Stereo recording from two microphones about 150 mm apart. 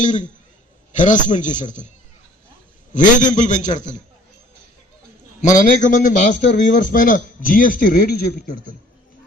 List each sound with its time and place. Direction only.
0.0 s a man's voice: 55° left (ahead or behind)
2.9 s a man's voice: 60° left (ahead or behind)
5.4 s a man's voice: 55° left (ahead or behind)